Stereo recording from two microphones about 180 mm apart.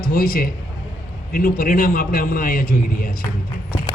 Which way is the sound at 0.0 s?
50° left (ahead or behind).